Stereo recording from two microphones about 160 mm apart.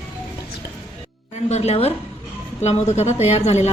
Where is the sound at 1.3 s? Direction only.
45° left (ahead or behind).